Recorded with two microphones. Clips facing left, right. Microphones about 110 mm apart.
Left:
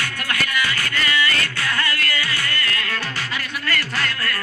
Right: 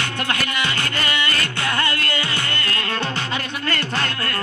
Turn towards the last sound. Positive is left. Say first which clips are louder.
# right 1 dB
turn(degrees=-25)  # may be behind; listen again after turning